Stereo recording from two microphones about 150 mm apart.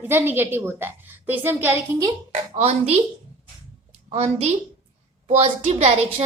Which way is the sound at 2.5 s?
45° right (ahead or behind).